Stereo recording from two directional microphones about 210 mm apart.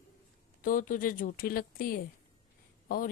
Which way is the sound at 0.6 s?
40° left (ahead or behind).